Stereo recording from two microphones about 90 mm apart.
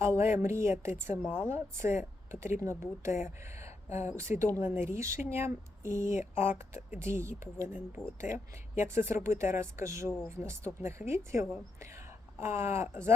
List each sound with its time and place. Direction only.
0.0 s a woman's voice: 30° right (ahead or behind)
8.0 s speech: 5° left (ahead or behind)
8.7 s a woman's voice: 25° right (ahead or behind)